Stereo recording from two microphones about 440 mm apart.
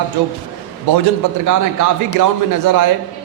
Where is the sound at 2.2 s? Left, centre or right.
Right.